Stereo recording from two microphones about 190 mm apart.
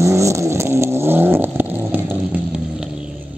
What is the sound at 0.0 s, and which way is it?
Vehicle, 15° right (ahead or behind).